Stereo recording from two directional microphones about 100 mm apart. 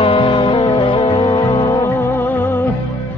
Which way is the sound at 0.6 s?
55° left (ahead or behind).